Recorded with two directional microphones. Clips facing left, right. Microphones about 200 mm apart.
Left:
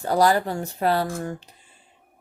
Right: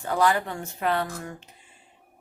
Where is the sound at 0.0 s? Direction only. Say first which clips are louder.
Left 4 dB; 35° left (ahead or behind).